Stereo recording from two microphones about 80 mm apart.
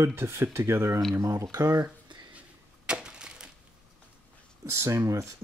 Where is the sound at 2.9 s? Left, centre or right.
Centre.